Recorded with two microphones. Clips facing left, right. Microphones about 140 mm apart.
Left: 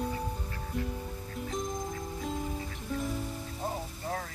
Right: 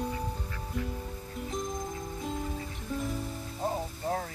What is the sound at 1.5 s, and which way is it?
Music, centre (ahead or behind).